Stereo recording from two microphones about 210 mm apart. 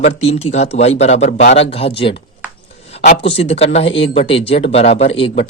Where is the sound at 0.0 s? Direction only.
30° left (ahead or behind).